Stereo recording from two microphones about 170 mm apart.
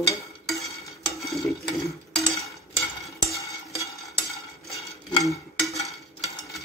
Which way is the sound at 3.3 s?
20° left (ahead or behind).